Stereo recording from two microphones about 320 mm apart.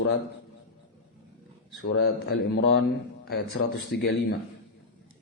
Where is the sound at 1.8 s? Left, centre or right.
Left.